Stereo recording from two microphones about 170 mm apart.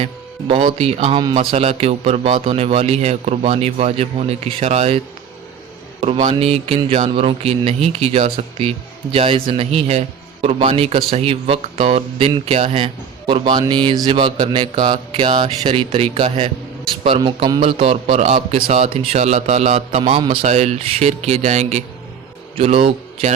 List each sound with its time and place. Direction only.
0.0 s a man's voice: 35° right (ahead or behind)